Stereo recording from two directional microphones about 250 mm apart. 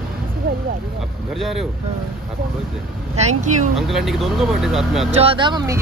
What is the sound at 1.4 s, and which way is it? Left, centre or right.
Speech, centre.